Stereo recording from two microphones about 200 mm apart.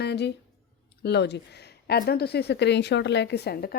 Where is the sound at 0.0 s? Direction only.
55° left (ahead or behind).